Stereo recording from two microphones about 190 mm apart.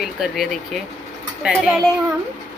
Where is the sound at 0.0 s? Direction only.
Centre (ahead or behind).